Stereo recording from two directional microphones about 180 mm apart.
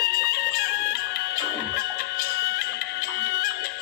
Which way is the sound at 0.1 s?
60° left (ahead or behind).